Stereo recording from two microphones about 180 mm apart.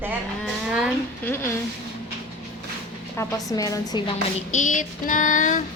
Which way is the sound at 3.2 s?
20° left (ahead or behind).